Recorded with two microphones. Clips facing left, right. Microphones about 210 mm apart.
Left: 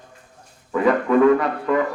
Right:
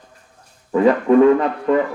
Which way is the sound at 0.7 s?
30° right (ahead or behind).